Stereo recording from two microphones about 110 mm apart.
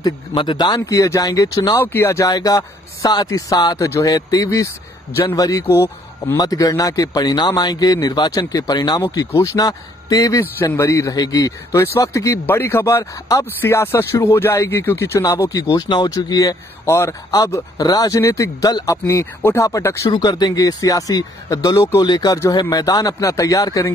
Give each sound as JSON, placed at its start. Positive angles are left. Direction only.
{"t": 0.0, "sound": "speech", "side_deg": 45}
{"t": 1.8, "sound": "speech", "side_deg": 20}
{"t": 6.3, "sound": "speech", "side_deg": 35}
{"t": 10.6, "sound": "speech", "side_deg": 25}
{"t": 15.9, "sound": "speech", "side_deg": 45}
{"t": 20.1, "sound": "speech", "side_deg": 40}